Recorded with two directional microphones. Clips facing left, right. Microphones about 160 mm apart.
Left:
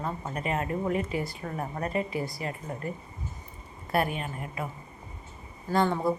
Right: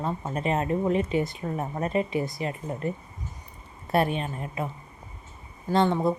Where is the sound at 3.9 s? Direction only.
25° right (ahead or behind).